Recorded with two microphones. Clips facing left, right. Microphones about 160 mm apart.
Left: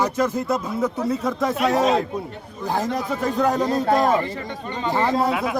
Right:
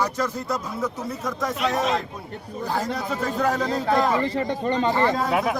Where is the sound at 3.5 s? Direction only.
20° left (ahead or behind).